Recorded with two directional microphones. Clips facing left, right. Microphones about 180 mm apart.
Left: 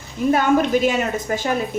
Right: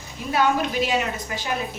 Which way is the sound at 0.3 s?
50° left (ahead or behind).